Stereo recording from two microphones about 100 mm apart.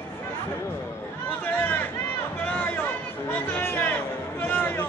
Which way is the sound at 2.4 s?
15° left (ahead or behind).